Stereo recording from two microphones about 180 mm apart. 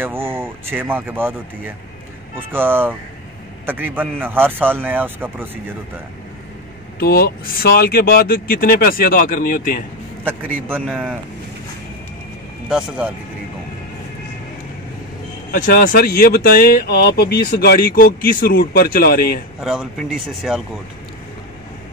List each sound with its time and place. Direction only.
0.0 s a man's voice: 15° right (ahead or behind)
2.3 s a man's voice: 10° right (ahead or behind)
7.0 s speech: 60° left (ahead or behind)
10.2 s a man's voice: 10° right (ahead or behind)
12.6 s speech: 5° right (ahead or behind)
15.5 s speech: 50° left (ahead or behind)
19.6 s speech: centre (ahead or behind)